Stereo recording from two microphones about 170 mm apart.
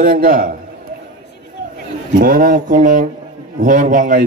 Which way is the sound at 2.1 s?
55° right (ahead or behind).